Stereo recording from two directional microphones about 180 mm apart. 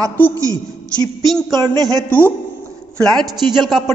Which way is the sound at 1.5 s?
20° right (ahead or behind).